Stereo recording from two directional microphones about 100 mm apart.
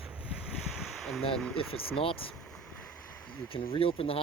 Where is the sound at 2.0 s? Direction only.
65° left (ahead or behind).